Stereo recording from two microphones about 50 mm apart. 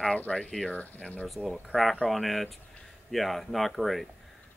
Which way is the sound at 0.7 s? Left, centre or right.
Left.